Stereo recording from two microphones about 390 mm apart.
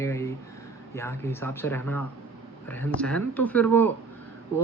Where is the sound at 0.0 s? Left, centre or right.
Centre.